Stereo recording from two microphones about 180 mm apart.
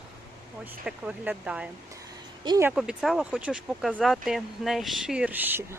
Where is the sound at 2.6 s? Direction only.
5° right (ahead or behind).